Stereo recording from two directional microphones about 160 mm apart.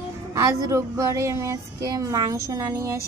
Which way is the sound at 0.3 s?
20° right (ahead or behind).